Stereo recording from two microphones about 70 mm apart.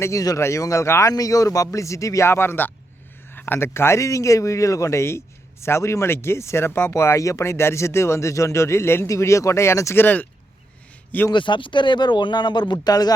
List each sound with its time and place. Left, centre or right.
0.0 s speech: left
1.1 s speech: left
10.0 s speech: left
11.3 s speech: left